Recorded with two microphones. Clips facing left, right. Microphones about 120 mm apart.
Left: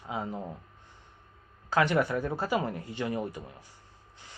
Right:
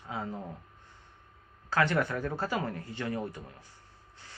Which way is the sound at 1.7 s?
15° left (ahead or behind).